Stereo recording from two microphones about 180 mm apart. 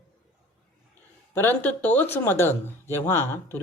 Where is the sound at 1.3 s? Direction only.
10° left (ahead or behind).